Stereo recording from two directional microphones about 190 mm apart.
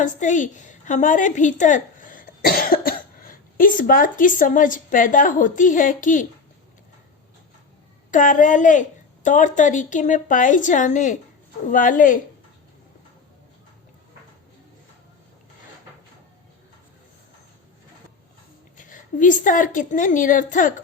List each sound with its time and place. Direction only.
0.0 s a woman's voice: 40° left (ahead or behind)
8.1 s a woman's voice: 45° left (ahead or behind)
18.8 s a woman's voice: 45° left (ahead or behind)